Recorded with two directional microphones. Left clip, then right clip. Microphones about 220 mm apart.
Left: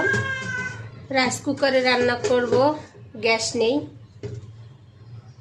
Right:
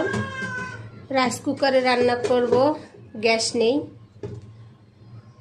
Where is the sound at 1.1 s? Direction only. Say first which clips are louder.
Even; 5° right (ahead or behind).